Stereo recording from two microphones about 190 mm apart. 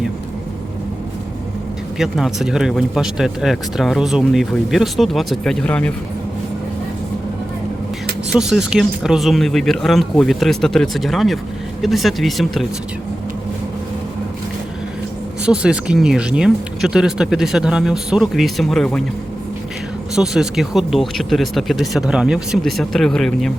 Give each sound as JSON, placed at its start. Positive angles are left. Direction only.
{"t": 2.0, "sound": "speech", "side_deg": 0}
{"t": 8.3, "sound": "speech", "side_deg": -5}
{"t": 15.4, "sound": "speech", "side_deg": -5}
{"t": 20.1, "sound": "speech", "side_deg": -5}